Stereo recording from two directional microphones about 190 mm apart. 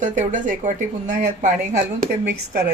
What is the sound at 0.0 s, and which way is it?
Speech, 40° right (ahead or behind).